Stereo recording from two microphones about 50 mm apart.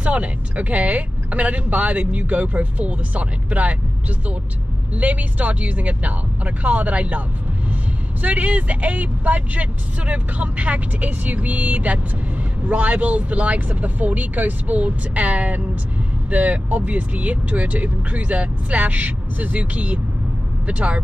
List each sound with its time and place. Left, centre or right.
0.0 s speech: right
4.9 s speech: right